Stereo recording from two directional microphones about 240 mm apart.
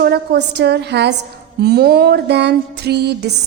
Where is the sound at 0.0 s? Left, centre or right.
Right.